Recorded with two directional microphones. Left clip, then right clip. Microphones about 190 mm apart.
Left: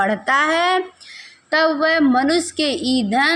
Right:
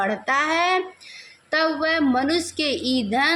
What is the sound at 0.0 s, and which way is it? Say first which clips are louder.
A woman's voice: left 5 dB; 25° left (ahead or behind).